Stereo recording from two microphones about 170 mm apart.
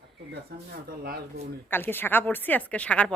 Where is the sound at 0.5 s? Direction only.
70° right (ahead or behind).